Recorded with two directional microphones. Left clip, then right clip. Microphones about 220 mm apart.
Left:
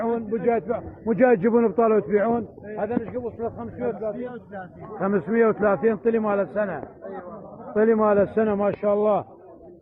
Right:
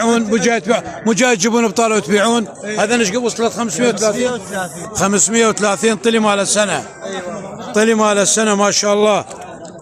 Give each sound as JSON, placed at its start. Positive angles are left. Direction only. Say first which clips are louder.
{"t": 0.0, "sound": "a man's voice", "louder": "right 9 dB", "side_deg": -50}
{"t": 2.7, "sound": "a man's voice", "louder": "right 12 dB", "side_deg": -25}